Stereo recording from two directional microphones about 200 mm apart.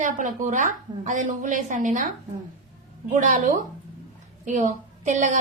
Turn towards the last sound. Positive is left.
turn(degrees=-35)  # may be behind; listen again after turning